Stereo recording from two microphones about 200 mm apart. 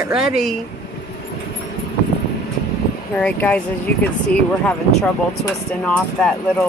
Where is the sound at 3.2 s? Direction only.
10° left (ahead or behind).